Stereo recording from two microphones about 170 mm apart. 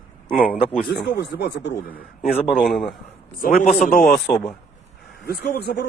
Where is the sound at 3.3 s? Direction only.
55° left (ahead or behind).